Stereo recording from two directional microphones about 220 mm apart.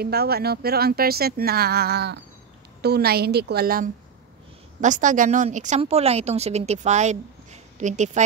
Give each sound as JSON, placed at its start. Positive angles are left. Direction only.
{"t": 0.0, "sound": "a woman's voice", "side_deg": -45}